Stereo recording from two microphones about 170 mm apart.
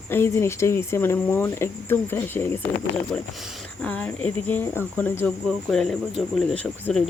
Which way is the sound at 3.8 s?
10° left (ahead or behind).